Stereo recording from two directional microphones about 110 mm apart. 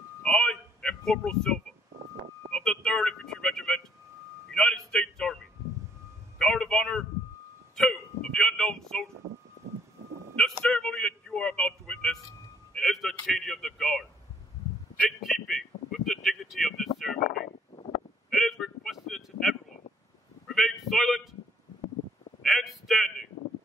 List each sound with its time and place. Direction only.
0.2 s sheep: 5° left (ahead or behind)
2.5 s a man's voice: 5° left (ahead or behind)
10.3 s a man's voice: 5° left (ahead or behind)
15.0 s speech: centre (ahead or behind)
17.5 s a sound: 65° left (ahead or behind)
18.3 s a sound: centre (ahead or behind)
22.4 s a man's voice: centre (ahead or behind)